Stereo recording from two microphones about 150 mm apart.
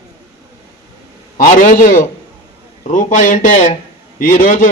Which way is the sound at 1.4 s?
60° left (ahead or behind).